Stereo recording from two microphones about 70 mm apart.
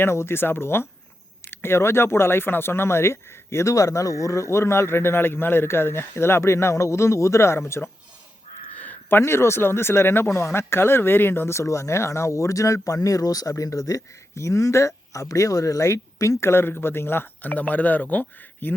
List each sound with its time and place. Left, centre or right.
0.0 s speech: left
8.7 s speech: left
16.4 s speech: left